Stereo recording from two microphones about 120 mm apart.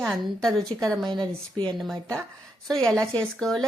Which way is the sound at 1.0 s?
35° right (ahead or behind).